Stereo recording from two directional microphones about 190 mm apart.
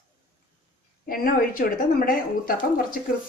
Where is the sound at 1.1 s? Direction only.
50° left (ahead or behind).